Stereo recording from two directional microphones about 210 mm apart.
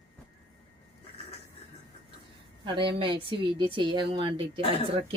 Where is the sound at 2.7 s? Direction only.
25° right (ahead or behind).